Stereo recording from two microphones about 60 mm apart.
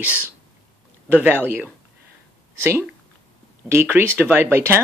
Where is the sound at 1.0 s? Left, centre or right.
Right.